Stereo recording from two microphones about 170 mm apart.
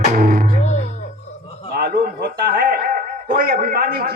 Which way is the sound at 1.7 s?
65° right (ahead or behind).